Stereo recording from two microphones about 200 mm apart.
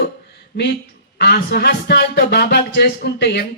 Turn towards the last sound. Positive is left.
turn(degrees=55)  # may be behind; listen again after turning